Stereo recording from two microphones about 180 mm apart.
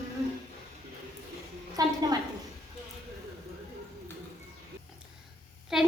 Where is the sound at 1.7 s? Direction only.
20° right (ahead or behind).